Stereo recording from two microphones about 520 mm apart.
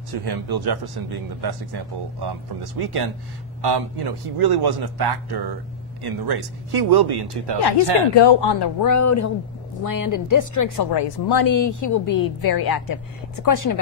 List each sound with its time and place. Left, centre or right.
0.1 s a man's voice: right
8.2 s speech: left
8.9 s speech: left
10.9 s speech: left